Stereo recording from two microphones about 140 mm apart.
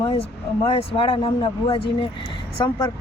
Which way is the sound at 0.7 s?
40° left (ahead or behind).